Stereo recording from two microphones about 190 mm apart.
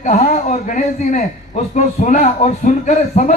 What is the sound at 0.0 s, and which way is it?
A man's voice, 40° left (ahead or behind).